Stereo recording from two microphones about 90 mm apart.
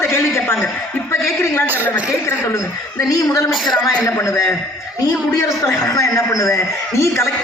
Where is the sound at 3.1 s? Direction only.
35° left (ahead or behind).